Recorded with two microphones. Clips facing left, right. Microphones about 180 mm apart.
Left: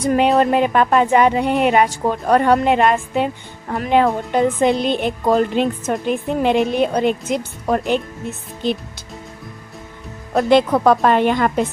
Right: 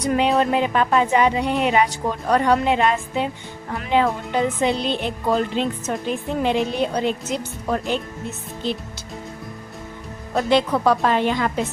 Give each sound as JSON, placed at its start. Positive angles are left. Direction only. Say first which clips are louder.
{"t": 0.0, "sound": "a woman's voice", "louder": "left 4 dB", "side_deg": 50}
{"t": 10.3, "sound": "speech", "louder": "left 5 dB", "side_deg": 55}